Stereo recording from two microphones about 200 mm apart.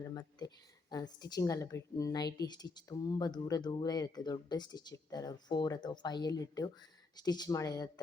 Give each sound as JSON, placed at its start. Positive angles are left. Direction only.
{"t": 0.1, "sound": "speech", "side_deg": 20}